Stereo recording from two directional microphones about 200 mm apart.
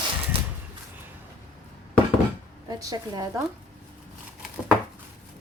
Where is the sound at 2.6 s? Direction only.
20° right (ahead or behind).